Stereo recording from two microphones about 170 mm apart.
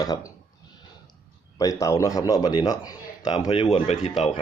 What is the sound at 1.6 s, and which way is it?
A man's voice, 20° left (ahead or behind).